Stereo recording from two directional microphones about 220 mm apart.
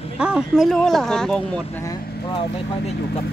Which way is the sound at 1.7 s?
15° left (ahead or behind).